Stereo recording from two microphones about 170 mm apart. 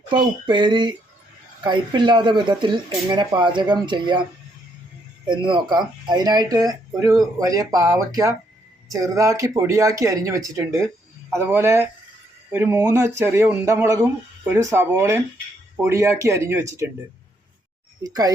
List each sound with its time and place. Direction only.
0.1 s speech: 30° right (ahead or behind)
5.2 s speech: 30° right (ahead or behind)
18.0 s speech: 20° right (ahead or behind)